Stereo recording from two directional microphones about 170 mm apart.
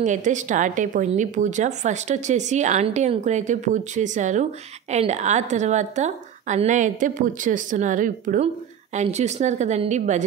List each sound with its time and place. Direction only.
0.0 s a woman's voice: 45° right (ahead or behind)